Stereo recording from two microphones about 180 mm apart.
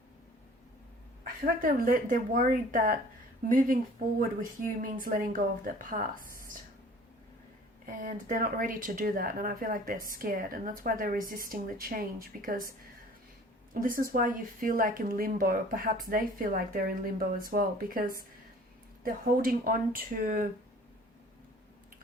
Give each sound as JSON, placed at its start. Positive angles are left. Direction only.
{"t": 1.2, "sound": "speech", "side_deg": -50}
{"t": 4.8, "sound": "speech", "side_deg": -50}
{"t": 7.9, "sound": "speech", "side_deg": -50}
{"t": 13.8, "sound": "speech", "side_deg": -50}